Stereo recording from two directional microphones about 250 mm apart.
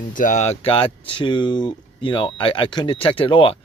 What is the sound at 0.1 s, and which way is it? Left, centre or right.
Speech, left.